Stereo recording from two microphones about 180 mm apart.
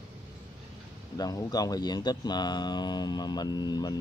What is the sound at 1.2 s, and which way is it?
Speech, 20° left (ahead or behind).